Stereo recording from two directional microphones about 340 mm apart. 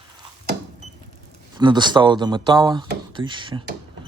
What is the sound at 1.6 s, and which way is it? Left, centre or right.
Speech, centre.